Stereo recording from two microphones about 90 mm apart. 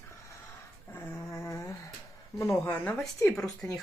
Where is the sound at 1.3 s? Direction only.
30° left (ahead or behind).